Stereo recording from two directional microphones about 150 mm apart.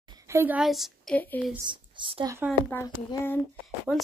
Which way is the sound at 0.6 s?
Centre (ahead or behind).